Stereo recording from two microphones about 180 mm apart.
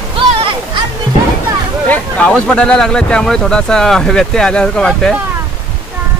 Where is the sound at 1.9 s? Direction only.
5° left (ahead or behind).